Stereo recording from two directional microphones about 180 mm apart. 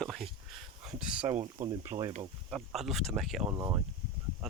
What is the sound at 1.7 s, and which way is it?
Speech, 20° right (ahead or behind).